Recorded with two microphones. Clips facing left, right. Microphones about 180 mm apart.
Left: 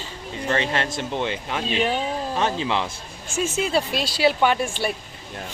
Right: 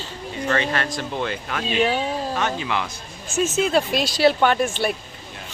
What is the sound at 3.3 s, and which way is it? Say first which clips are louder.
Speech: right 3 dB; 10° left (ahead or behind).